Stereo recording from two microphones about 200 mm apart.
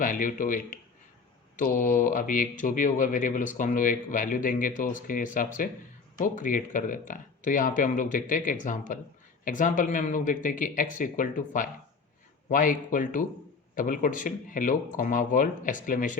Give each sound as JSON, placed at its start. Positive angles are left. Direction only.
{"t": 0.0, "sound": "speech", "side_deg": 40}